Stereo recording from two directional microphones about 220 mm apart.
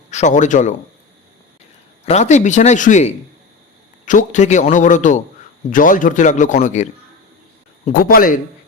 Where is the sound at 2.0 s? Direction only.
30° left (ahead or behind).